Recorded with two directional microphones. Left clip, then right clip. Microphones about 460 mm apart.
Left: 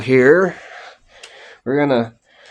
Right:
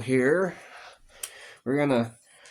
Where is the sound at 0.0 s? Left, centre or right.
Centre.